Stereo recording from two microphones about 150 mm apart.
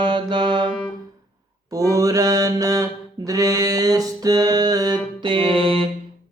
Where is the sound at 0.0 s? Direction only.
35° right (ahead or behind).